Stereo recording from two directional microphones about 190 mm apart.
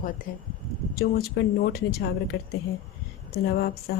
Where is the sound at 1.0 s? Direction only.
55° left (ahead or behind).